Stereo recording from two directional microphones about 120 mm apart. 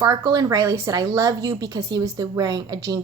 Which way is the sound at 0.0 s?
30° right (ahead or behind).